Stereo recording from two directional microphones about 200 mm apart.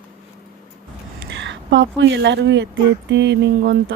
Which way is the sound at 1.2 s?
60° right (ahead or behind).